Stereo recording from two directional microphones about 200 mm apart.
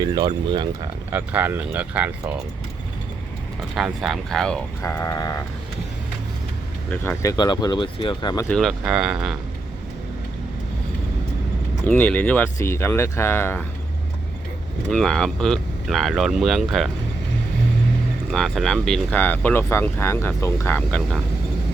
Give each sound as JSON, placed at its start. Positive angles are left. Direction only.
{"t": 0.0, "sound": "speech", "side_deg": -25}
{"t": 1.1, "sound": "speech", "side_deg": -10}
{"t": 3.8, "sound": "speech", "side_deg": 0}
{"t": 4.8, "sound": "speech", "side_deg": 15}
{"t": 6.9, "sound": "speech", "side_deg": 10}
{"t": 8.4, "sound": "speech", "side_deg": 0}
{"t": 11.9, "sound": "speech", "side_deg": 10}
{"t": 14.8, "sound": "speech", "side_deg": 5}
{"t": 18.3, "sound": "speech", "side_deg": 0}